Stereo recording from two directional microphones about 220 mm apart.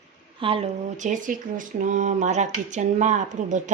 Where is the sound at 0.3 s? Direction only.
25° right (ahead or behind).